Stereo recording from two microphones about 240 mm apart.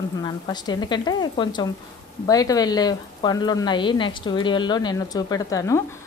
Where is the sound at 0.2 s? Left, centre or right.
Centre.